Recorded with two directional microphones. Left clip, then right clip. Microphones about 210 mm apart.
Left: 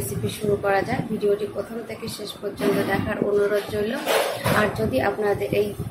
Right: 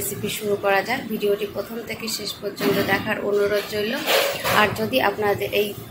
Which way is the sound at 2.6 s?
Centre (ahead or behind).